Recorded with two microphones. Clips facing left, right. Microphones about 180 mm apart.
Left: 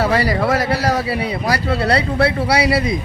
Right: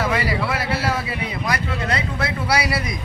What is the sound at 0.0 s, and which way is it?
A man's voice, 40° left (ahead or behind).